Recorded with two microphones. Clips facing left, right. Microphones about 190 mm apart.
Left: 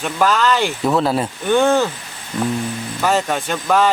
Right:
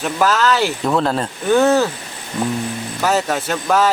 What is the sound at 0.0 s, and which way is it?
Speech, 5° right (ahead or behind).